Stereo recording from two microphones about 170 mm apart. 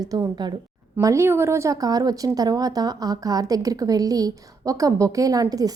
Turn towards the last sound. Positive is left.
turn(degrees=-20)  # may be behind; listen again after turning